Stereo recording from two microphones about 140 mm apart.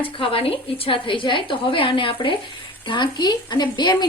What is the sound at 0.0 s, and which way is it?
A woman's voice, 40° left (ahead or behind).